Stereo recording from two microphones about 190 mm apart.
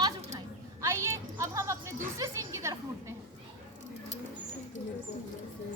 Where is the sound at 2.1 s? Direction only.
15° right (ahead or behind).